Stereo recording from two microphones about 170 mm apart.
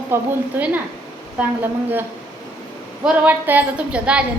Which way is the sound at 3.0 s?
10° right (ahead or behind).